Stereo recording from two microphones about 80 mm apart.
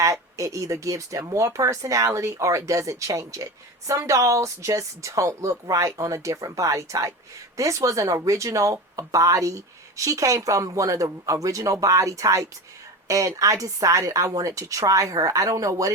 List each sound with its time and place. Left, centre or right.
0.0 s speech: right